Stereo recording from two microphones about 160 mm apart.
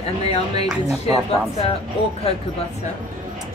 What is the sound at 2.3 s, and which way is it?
Speech, 35° left (ahead or behind).